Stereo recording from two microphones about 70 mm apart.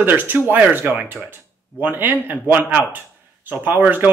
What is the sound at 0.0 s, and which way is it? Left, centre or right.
Speech, right.